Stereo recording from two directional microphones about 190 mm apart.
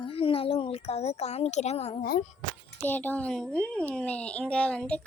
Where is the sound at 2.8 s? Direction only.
10° left (ahead or behind).